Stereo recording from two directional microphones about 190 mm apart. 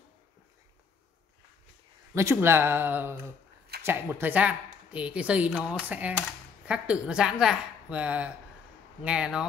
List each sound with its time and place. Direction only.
2.1 s a woman's voice: 15° right (ahead or behind)